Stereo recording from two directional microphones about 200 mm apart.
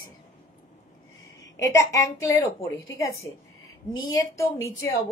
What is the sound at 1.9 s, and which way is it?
Speech, 15° left (ahead or behind).